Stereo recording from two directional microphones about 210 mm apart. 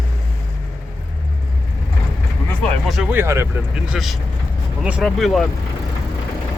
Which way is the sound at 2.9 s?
5° right (ahead or behind).